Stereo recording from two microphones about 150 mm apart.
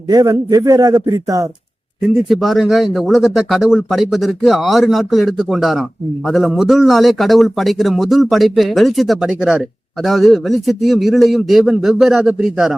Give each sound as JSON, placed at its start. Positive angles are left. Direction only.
{"t": 0.1, "sound": "speech", "side_deg": -25}
{"t": 2.3, "sound": "a man's voice", "side_deg": 0}